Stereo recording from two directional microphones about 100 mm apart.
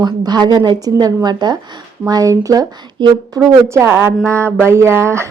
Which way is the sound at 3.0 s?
45° right (ahead or behind).